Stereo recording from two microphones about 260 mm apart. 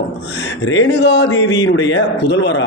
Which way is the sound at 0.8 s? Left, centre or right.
Left.